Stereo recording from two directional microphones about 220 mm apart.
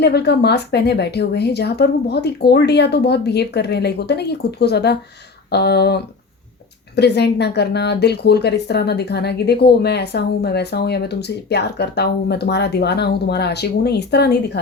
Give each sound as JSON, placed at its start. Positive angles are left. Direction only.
{"t": 0.0, "sound": "speech", "side_deg": 50}